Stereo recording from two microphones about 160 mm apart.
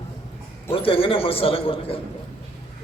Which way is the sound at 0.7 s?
35° left (ahead or behind).